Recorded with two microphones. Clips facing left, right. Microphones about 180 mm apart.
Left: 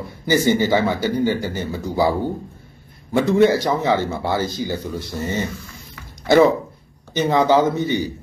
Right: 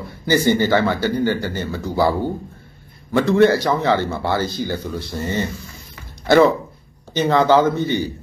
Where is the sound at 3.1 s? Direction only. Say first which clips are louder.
Right 1 dB; 15° left (ahead or behind).